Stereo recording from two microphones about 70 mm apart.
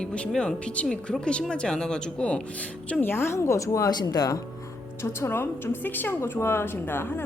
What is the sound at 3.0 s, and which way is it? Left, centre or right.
Speech, left.